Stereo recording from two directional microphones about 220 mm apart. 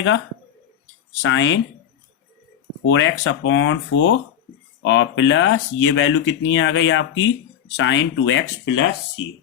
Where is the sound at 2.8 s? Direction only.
60° left (ahead or behind).